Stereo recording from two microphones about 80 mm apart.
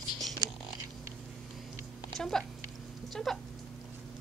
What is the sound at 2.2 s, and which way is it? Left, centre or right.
A woman's voice, centre.